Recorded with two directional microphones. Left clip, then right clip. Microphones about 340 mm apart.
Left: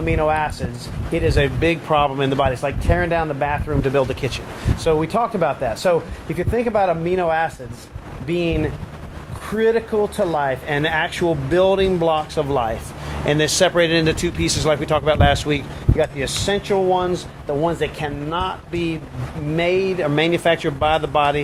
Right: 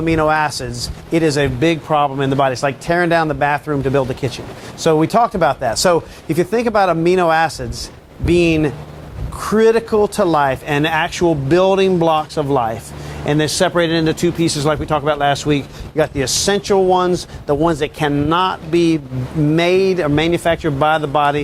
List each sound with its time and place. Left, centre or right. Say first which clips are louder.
0.0 s speech: right 4 dB; right
3.8 s speech: left 1 dB; right
4.8 s speech: right 5 dB; right
16.0 s speech: right 5 dB; right